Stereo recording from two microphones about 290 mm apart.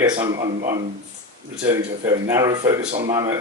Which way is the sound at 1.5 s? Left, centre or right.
Centre.